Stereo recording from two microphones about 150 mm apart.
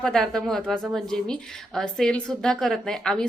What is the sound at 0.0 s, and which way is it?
A woman's voice, 5° left (ahead or behind).